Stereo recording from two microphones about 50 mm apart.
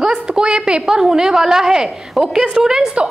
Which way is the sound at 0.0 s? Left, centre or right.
Centre.